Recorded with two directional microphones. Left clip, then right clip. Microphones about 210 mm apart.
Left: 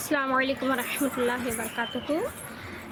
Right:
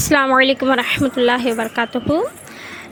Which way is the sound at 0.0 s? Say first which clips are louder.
Right 12 dB; 40° right (ahead or behind).